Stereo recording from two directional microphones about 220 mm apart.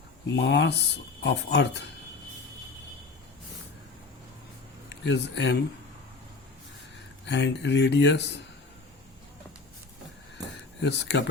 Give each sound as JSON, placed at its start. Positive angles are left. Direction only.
{"t": 0.3, "sound": "speech", "side_deg": 50}
{"t": 4.9, "sound": "speech", "side_deg": 55}
{"t": 7.3, "sound": "speech", "side_deg": 50}
{"t": 10.8, "sound": "speech", "side_deg": 50}